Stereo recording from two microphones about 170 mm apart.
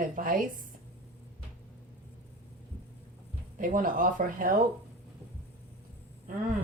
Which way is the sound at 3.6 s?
55° right (ahead or behind).